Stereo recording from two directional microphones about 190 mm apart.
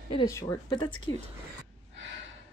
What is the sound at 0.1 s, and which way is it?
Speech, 15° left (ahead or behind).